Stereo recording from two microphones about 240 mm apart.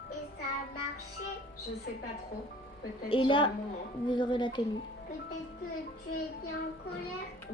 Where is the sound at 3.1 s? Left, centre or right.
Left.